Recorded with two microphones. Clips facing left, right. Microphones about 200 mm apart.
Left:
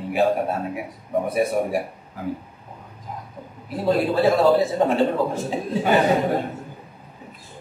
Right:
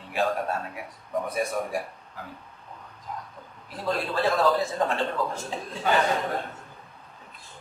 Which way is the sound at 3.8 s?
20° left (ahead or behind).